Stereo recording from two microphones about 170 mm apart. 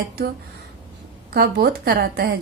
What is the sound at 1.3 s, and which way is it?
A woman's voice, 70° right (ahead or behind).